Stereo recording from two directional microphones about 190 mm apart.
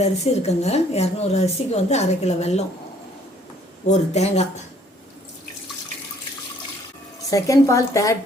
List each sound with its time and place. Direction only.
0.0 s speech: 35° left (ahead or behind)
3.8 s speech: 35° left (ahead or behind)
7.3 s a woman's voice: 15° left (ahead or behind)